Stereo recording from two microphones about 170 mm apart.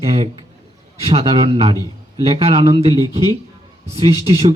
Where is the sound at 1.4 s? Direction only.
35° right (ahead or behind).